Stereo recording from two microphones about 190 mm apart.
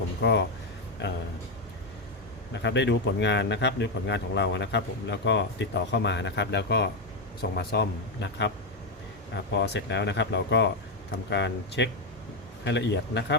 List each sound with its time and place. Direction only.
0.2 s speech: 65° left (ahead or behind)
2.5 s a man's voice: 65° left (ahead or behind)
9.6 s a man's voice: 65° left (ahead or behind)